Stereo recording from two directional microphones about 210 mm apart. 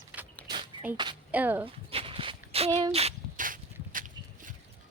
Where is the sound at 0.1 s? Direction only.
5° right (ahead or behind).